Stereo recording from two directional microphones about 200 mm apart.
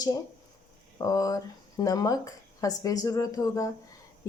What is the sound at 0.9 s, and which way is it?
Speech, 15° left (ahead or behind).